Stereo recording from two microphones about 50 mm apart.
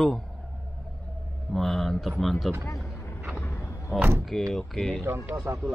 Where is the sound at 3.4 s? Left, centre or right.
Left.